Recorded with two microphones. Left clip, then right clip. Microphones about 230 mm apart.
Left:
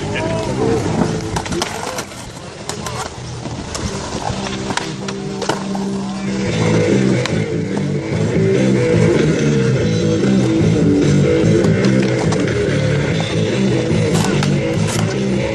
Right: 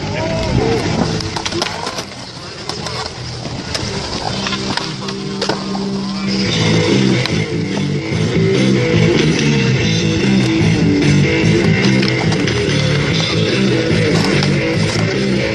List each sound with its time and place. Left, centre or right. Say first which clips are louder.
6.4 s vehicle: right 1 dB; right
8.3 s music: even; right